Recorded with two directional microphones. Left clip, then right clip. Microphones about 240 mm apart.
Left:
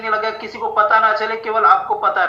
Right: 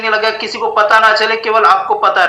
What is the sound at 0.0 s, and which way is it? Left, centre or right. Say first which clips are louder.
A man's voice: right 6 dB; right.